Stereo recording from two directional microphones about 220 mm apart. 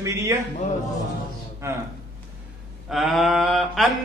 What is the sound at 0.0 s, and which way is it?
Speech, 15° right (ahead or behind).